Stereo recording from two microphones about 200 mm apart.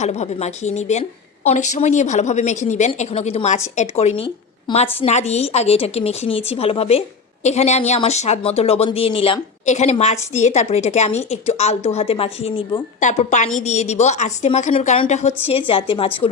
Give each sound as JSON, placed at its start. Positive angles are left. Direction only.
{"t": 0.0, "sound": "a woman's voice", "side_deg": 35}